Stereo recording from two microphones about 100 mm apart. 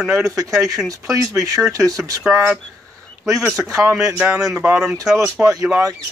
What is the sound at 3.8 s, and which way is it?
Speech, 30° right (ahead or behind).